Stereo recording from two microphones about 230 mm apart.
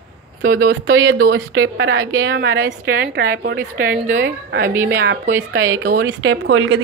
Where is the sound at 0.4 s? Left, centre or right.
Right.